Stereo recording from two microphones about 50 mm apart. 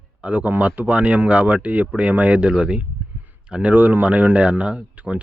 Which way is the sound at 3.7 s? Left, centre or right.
Right.